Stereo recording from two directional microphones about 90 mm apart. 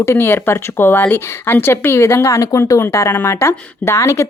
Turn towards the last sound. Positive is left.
turn(degrees=35)  # may be behind; listen again after turning